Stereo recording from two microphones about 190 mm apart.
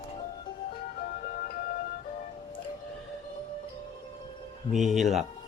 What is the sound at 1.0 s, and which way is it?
Music, 45° left (ahead or behind).